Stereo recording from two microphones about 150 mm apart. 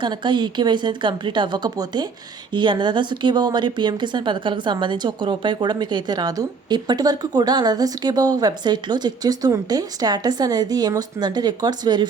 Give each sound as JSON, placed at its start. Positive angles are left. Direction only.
{"t": 0.0, "sound": "a woman's voice", "side_deg": -30}